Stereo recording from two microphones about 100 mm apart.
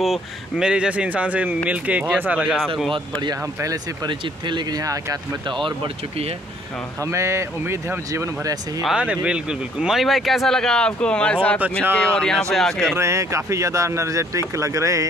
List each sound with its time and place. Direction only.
0.0 s speech: 5° right (ahead or behind)
2.9 s speech: 45° right (ahead or behind)
3.6 s speech: 35° right (ahead or behind)
4.1 s speech: 50° right (ahead or behind); by 5.2 s 35° right (ahead or behind)
7.1 s speech: 30° right (ahead or behind)
8.1 s speech: 35° right (ahead or behind)
8.8 s speech: 10° right (ahead or behind)
12.9 s speech: 30° right (ahead or behind)